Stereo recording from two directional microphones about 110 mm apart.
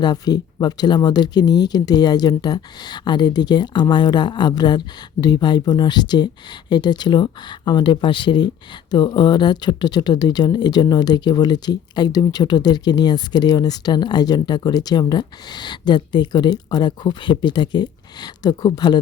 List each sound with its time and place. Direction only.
0.0 s speech: 40° left (ahead or behind)